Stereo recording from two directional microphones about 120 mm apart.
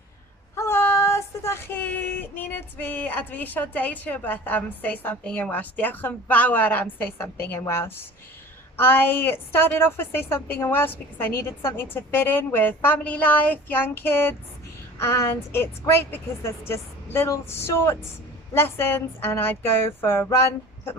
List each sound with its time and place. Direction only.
0.5 s child singing: 20° left (ahead or behind)
8.7 s a woman's voice: 15° left (ahead or behind)